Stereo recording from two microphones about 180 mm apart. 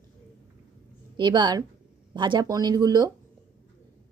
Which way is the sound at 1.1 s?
25° right (ahead or behind).